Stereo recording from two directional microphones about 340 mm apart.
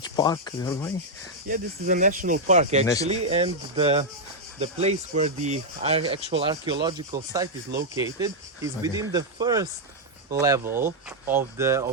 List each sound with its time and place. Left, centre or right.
0.2 s speech: centre
1.5 s speech: right; by 11.9 s centre